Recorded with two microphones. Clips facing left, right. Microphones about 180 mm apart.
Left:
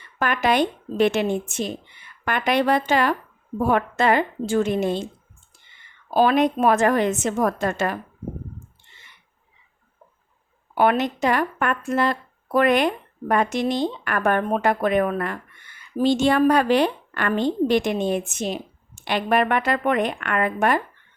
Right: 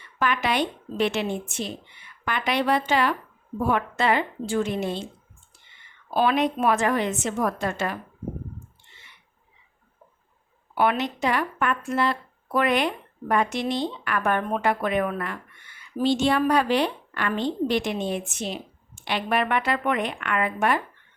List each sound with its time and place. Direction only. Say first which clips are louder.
0.2 s a woman's voice: left 4 dB; 50° left (ahead or behind)
6.1 s a woman's voice: left 4 dB; 45° left (ahead or behind)
10.8 s a woman's voice: left 4 dB; 45° left (ahead or behind)